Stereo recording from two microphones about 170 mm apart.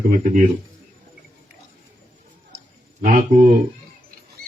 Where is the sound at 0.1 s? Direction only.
50° right (ahead or behind).